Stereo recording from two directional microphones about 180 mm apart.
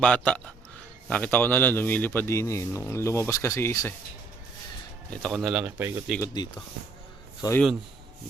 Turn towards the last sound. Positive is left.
turn(degrees=25)  # may be behind; listen again after turning